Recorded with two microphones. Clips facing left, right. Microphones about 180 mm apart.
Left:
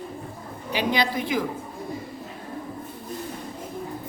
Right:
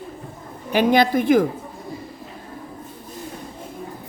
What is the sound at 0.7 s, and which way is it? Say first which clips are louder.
Speech: right 8 dB; 50° right (ahead or behind).